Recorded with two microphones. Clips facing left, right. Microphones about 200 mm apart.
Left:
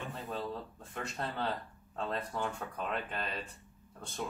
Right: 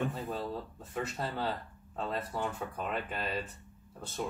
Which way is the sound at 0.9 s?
5° right (ahead or behind).